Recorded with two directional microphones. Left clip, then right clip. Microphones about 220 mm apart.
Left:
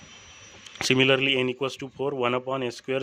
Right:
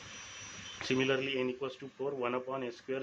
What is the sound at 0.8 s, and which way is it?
A man's voice, 55° left (ahead or behind).